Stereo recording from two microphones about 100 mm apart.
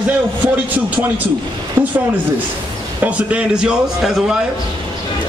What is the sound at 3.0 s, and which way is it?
A man's voice, 15° right (ahead or behind).